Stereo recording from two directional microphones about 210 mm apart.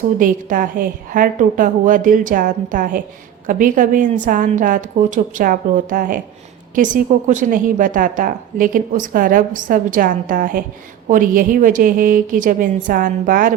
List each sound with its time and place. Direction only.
0.2 s a woman's voice: 40° right (ahead or behind)